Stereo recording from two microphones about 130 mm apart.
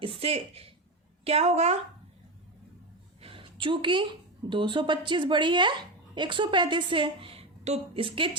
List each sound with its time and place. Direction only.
0.0 s a sound: 45° right (ahead or behind)
1.2 s a woman's voice: 55° right (ahead or behind)
3.2 s a woman's voice: 45° right (ahead or behind)
8.0 s a woman's voice: 40° right (ahead or behind)